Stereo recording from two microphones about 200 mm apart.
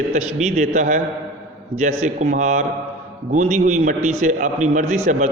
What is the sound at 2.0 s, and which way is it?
A man's voice, 35° right (ahead or behind).